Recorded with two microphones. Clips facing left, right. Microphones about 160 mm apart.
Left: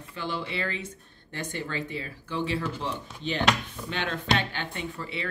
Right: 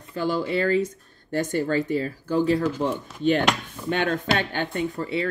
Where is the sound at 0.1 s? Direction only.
40° right (ahead or behind).